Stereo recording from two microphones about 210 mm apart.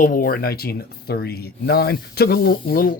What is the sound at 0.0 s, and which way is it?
Speech, 40° left (ahead or behind).